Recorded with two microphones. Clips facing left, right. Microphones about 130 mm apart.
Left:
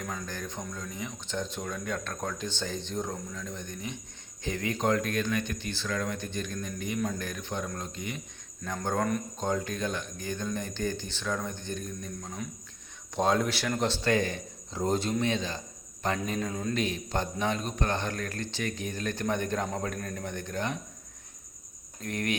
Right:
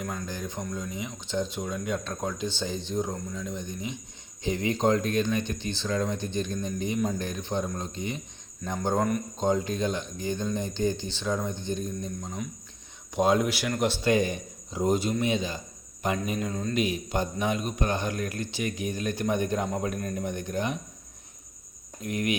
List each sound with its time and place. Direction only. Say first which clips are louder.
0.0 s a man's voice: right 3 dB; centre (ahead or behind)
0.3 s speech: right 3 dB; 10° right (ahead or behind)
16.5 s a man's voice: right 1 dB; 5° left (ahead or behind)
16.7 s speech: right 5 dB; 10° right (ahead or behind)
22.0 s speech: right 3 dB; 10° right (ahead or behind)